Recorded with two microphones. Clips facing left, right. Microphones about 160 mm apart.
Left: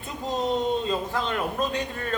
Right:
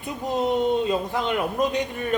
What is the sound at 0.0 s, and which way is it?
A woman's voice, 15° right (ahead or behind).